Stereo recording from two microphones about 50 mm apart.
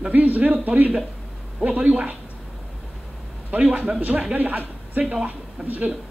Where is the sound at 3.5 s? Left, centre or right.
Right.